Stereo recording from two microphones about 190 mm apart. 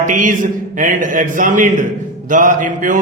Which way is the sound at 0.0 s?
45° right (ahead or behind).